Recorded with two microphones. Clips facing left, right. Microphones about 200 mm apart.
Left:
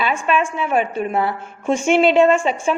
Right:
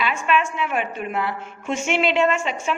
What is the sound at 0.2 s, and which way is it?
A woman's voice, 30° left (ahead or behind).